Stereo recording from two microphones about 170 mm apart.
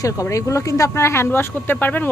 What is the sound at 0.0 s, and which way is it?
Speech, 20° left (ahead or behind).